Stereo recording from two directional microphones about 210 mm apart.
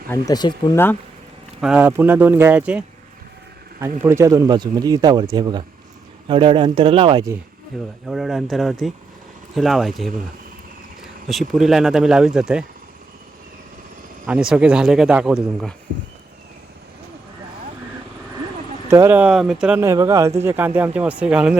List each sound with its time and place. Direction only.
0.1 s speech: 20° left (ahead or behind)
1.6 s speech: 5° right (ahead or behind); by 7.3 s 20° right (ahead or behind)
8.0 s speech: centre (ahead or behind)
11.3 s speech: centre (ahead or behind)
14.3 s speech: 5° right (ahead or behind)
18.9 s speech: 10° right (ahead or behind)